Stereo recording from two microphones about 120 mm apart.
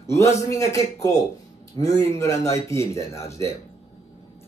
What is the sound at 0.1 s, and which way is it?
Speech, 25° left (ahead or behind).